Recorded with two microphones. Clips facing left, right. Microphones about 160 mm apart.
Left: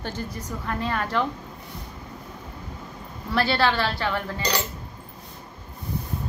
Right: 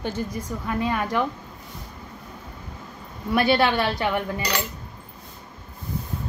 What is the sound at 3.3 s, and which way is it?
A woman's voice, 20° right (ahead or behind).